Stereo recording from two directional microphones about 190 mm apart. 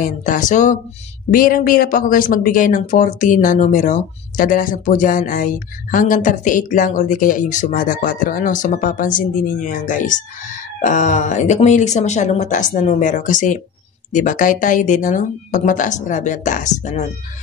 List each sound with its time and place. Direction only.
0.0 s speech: 45° left (ahead or behind)